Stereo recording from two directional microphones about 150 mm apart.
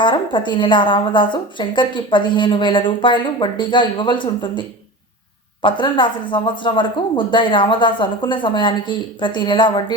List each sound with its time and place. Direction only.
0.0 s a woman's voice: 30° left (ahead or behind)
5.6 s a woman's voice: 30° left (ahead or behind)